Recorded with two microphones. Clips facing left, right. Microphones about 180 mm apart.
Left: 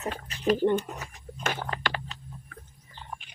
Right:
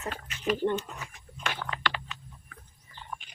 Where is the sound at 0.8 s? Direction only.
40° left (ahead or behind).